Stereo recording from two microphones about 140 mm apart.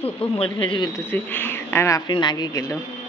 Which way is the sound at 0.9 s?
15° left (ahead or behind).